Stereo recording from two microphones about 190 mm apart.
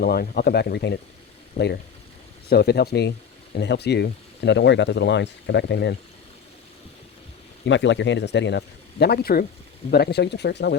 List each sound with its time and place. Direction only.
0.0 s speech: 55° left (ahead or behind)
7.6 s speech: 70° left (ahead or behind)